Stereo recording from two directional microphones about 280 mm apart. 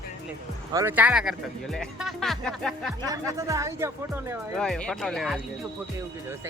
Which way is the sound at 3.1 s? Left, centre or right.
Centre.